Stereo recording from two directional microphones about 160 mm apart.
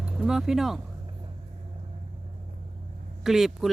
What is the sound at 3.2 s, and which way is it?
Speech, centre (ahead or behind).